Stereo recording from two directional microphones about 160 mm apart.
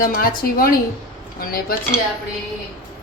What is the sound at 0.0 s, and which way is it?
A woman's voice, 65° left (ahead or behind).